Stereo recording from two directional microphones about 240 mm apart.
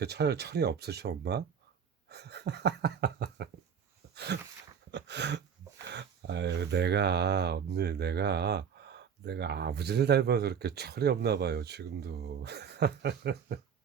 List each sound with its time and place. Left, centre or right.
0.0 s speech: right
4.1 s a sound: right
5.9 s speech: right